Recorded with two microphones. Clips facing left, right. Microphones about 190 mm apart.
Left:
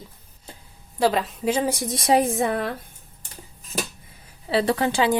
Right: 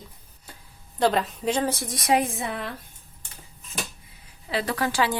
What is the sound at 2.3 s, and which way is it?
Speech, 45° left (ahead or behind).